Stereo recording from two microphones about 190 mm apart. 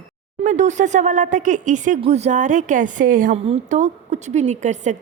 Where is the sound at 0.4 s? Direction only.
40° right (ahead or behind).